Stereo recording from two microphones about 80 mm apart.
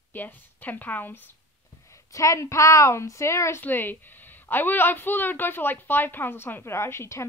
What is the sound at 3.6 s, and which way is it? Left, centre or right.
A woman's voice, left.